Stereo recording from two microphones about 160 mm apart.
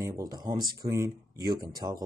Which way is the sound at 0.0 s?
20° right (ahead or behind).